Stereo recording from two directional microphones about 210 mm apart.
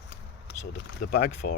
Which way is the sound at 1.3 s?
35° left (ahead or behind).